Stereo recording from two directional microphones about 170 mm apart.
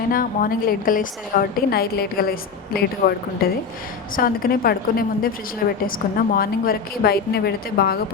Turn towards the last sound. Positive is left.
turn(degrees=65)  # may be behind; listen again after turning